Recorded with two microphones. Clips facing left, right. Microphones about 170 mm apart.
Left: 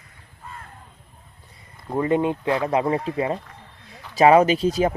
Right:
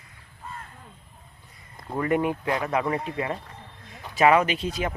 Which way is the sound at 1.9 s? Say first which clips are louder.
Left 3 dB; 25° left (ahead or behind).